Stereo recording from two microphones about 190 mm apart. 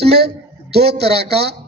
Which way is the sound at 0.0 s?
60° right (ahead or behind).